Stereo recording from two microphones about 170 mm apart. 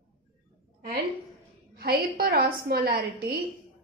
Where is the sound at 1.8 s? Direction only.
65° right (ahead or behind).